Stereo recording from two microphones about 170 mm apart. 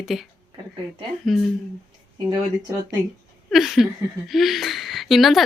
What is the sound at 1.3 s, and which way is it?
Speech, centre (ahead or behind).